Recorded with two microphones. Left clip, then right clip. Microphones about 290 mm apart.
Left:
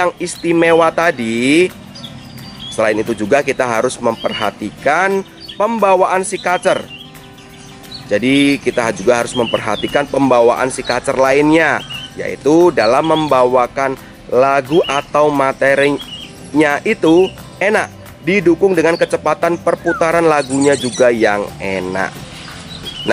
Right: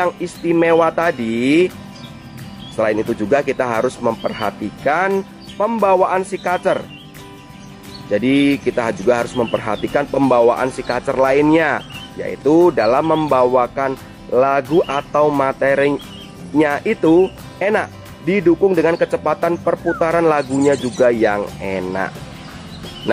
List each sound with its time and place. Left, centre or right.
0.0 s speech: centre
2.8 s speech: centre
8.1 s speech: centre
12.4 s speech: right
12.7 s speech: centre